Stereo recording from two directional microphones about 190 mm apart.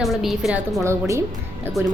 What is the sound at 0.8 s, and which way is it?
Speech, 15° right (ahead or behind).